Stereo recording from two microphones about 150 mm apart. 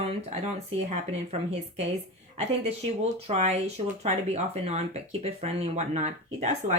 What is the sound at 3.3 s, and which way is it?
Speech, 50° right (ahead or behind).